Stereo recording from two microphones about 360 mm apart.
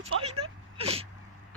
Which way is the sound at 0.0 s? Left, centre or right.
Centre.